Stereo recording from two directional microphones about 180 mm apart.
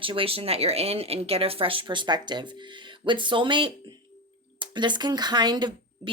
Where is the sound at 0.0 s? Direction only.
30° right (ahead or behind).